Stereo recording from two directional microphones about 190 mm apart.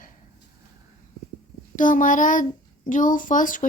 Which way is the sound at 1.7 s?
45° left (ahead or behind).